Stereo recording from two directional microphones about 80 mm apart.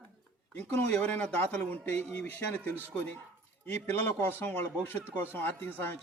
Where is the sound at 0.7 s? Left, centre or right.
Centre.